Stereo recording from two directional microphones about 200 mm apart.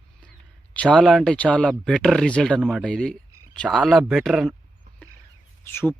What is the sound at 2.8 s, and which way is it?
Speech, 5° left (ahead or behind).